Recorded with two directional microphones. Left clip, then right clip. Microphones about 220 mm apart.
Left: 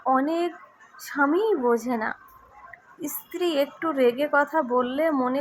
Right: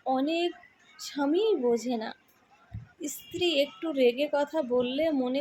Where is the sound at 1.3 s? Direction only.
30° left (ahead or behind).